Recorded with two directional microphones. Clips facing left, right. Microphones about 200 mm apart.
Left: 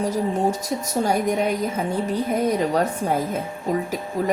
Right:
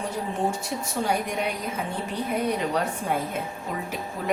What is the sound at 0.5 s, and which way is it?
A woman's voice, 40° left (ahead or behind).